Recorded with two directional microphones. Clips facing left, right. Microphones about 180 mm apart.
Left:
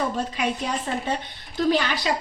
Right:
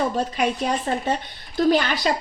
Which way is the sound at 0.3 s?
50° right (ahead or behind).